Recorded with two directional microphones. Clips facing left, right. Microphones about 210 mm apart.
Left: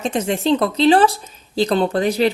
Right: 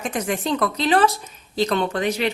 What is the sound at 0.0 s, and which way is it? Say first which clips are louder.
A woman's voice: left 5 dB; 25° left (ahead or behind).